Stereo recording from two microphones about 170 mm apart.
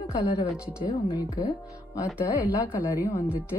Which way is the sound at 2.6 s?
15° left (ahead or behind).